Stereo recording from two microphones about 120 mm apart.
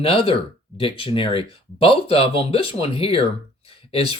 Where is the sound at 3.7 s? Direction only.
50° left (ahead or behind).